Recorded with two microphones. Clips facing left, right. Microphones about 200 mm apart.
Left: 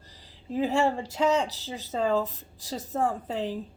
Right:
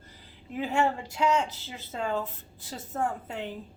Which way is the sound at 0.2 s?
35° left (ahead or behind).